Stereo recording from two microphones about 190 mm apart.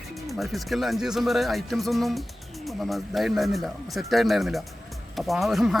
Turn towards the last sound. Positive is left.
turn(degrees=0)  # may be behind; listen again after turning